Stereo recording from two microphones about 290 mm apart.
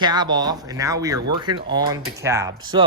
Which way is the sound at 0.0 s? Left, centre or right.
Centre.